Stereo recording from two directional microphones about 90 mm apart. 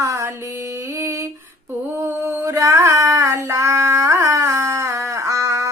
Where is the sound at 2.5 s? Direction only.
35° right (ahead or behind).